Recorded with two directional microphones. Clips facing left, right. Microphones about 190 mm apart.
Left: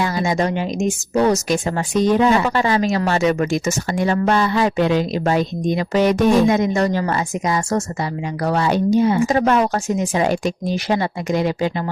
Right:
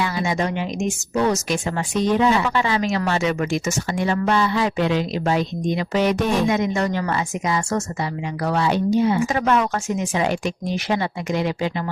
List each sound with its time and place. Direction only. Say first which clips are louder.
0.0 s speech: left 3 dB; 40° left (ahead or behind)